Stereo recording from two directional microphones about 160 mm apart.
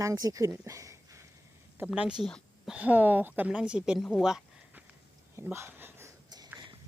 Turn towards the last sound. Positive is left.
turn(degrees=-25)  # may be behind; listen again after turning